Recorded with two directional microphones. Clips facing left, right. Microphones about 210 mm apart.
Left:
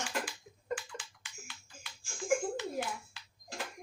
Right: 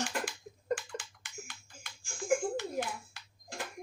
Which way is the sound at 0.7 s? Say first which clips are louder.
Right 4 dB; 45° right (ahead or behind).